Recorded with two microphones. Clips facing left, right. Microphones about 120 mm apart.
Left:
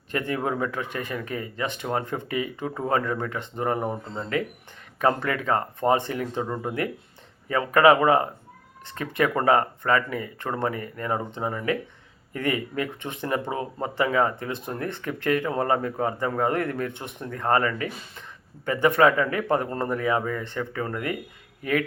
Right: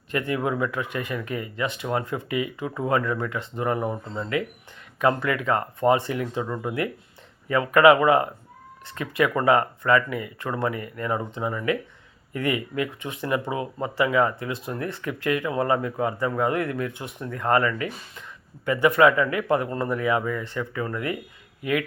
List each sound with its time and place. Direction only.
0.1 s speech: 35° left (ahead or behind)
3.8 s speech: 25° left (ahead or behind)
4.9 s speech: 35° left (ahead or behind)
17.0 s speech: 30° left (ahead or behind)